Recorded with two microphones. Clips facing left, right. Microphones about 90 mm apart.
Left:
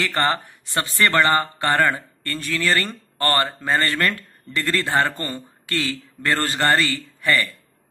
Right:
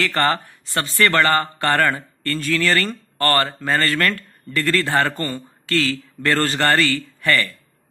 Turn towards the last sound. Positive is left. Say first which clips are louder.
# right 1 dB
turn(degrees=15)  # may be behind; listen again after turning